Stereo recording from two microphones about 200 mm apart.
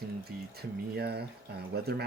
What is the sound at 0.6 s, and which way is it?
Speech, 55° right (ahead or behind).